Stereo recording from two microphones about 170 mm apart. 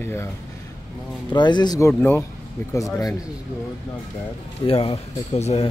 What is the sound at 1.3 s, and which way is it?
Speech, 25° left (ahead or behind).